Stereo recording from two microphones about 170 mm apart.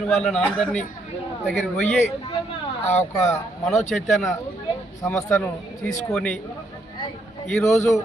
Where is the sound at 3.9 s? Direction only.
Centre (ahead or behind).